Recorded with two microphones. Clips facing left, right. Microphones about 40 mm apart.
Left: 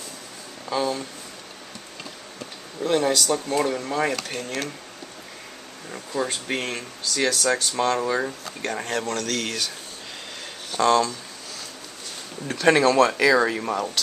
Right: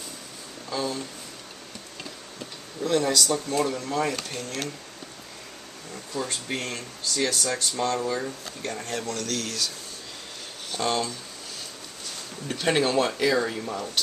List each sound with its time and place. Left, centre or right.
0.7 s speech: centre
2.8 s speech: centre
6.1 s speech: left
7.2 s speech: left
7.7 s speech: left
10.8 s speech: left
12.8 s speech: left
13.6 s speech: left